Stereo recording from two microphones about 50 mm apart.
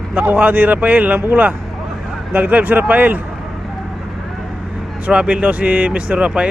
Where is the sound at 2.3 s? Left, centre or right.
Right.